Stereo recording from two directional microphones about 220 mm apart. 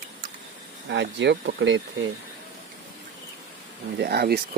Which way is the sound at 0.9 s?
55° right (ahead or behind).